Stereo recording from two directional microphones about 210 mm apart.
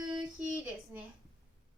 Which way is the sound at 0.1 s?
5° right (ahead or behind).